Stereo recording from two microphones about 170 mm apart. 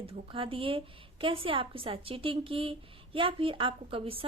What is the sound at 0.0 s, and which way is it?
A woman's voice, 30° right (ahead or behind).